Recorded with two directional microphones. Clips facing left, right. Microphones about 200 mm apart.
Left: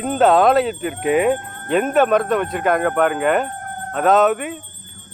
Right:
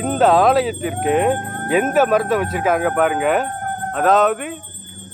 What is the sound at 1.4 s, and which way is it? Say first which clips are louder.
Music: right 8 dB; 50° right (ahead or behind).